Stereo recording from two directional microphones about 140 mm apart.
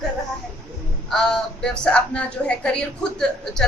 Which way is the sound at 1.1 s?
5° left (ahead or behind).